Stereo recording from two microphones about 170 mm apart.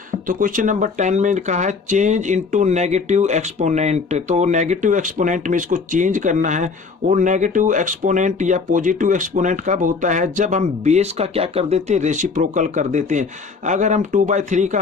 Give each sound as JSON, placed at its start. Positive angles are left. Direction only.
{"t": 0.1, "sound": "speech", "side_deg": -50}